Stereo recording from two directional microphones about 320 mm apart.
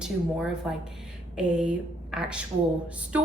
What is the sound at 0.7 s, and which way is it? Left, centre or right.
A woman's voice, centre.